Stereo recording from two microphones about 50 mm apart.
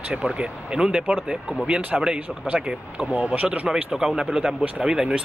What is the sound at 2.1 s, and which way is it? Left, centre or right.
Speech, right.